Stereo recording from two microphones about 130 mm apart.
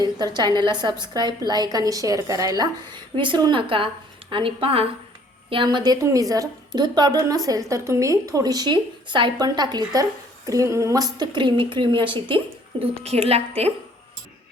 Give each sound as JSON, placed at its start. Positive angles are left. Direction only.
{"t": 0.0, "sound": "a woman's voice", "side_deg": -30}
{"t": 12.8, "sound": "a woman's voice", "side_deg": -50}